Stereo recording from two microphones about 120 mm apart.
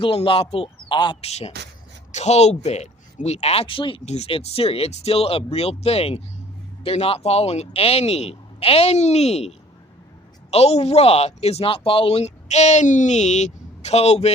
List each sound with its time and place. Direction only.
0.0 s a man's voice: 50° left (ahead or behind)
1.2 s speech: 60° left (ahead or behind); by 4.0 s 45° left (ahead or behind)
4.0 s speech: 65° left (ahead or behind)